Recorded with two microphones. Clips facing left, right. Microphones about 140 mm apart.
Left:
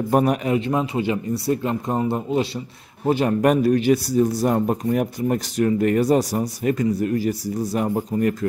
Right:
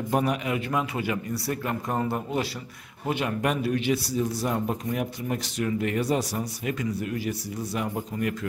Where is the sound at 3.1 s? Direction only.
40° left (ahead or behind).